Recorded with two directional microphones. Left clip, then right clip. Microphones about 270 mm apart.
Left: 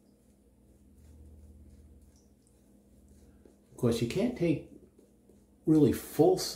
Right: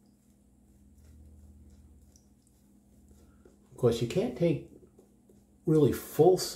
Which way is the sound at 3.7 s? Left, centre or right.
Centre.